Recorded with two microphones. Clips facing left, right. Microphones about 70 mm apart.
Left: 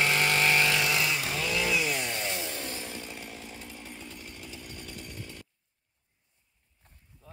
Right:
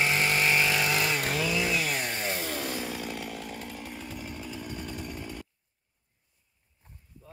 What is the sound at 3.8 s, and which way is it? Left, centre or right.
Chainsaw, centre.